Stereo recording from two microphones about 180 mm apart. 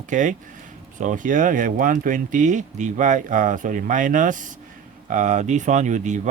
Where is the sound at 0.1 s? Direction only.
45° right (ahead or behind).